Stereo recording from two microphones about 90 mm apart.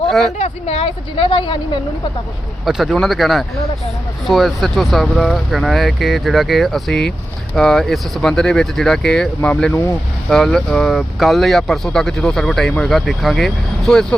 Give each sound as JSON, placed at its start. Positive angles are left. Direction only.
{"t": 0.8, "sound": "speech", "side_deg": 90}
{"t": 2.6, "sound": "speech", "side_deg": 0}